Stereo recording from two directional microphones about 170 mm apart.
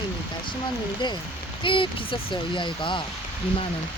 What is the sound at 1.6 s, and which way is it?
Speech, 30° left (ahead or behind).